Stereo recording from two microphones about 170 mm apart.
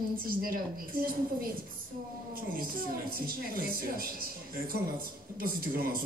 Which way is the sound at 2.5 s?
60° right (ahead or behind).